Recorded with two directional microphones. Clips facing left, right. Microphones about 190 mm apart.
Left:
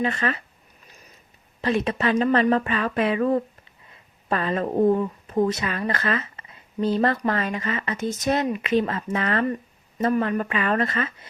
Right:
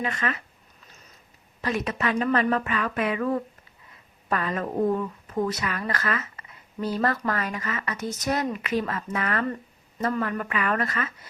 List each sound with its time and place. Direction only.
0.0 s speech: 30° left (ahead or behind)
1.6 s speech: 30° left (ahead or behind)